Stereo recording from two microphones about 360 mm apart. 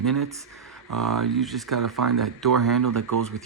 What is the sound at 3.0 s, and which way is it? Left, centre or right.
Speech, right.